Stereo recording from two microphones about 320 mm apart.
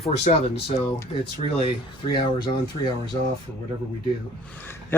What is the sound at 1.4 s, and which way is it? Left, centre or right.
Speech, centre.